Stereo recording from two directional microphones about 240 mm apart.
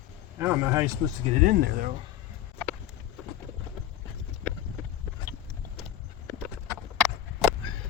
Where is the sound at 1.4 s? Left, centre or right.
Right.